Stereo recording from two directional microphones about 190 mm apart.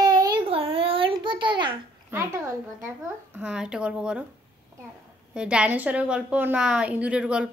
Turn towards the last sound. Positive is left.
turn(degrees=-5)  # may be behind; listen again after turning